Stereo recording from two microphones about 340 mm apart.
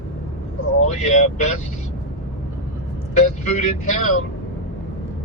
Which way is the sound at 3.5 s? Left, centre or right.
Centre.